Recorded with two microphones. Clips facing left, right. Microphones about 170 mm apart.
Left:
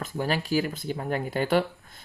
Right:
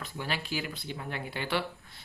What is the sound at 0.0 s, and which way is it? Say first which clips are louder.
Speech: left 8 dB; 45° left (ahead or behind).